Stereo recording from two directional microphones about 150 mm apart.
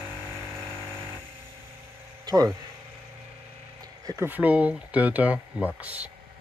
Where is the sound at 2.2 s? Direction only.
25° right (ahead or behind).